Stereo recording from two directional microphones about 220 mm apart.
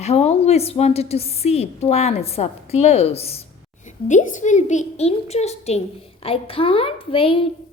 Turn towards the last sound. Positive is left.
turn(degrees=25)  # may be behind; listen again after turning